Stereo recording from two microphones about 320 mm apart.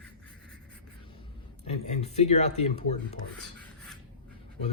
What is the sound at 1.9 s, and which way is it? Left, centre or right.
Speech, centre.